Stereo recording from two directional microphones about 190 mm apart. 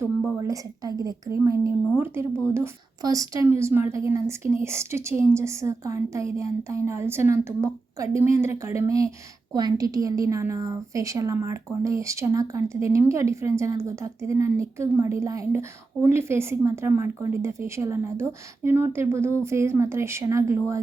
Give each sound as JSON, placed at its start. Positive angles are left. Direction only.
{"t": 0.0, "sound": "a woman's voice", "side_deg": -10}